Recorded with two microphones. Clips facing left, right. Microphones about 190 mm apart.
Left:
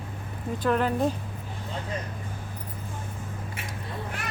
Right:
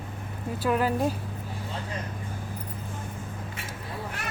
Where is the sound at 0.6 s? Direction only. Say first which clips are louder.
Left 1 dB; 5° right (ahead or behind).